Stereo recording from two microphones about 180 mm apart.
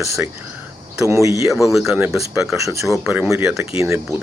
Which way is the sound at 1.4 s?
Centre (ahead or behind).